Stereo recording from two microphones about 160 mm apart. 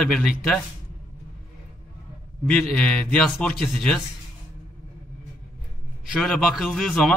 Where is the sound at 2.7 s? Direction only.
5° left (ahead or behind).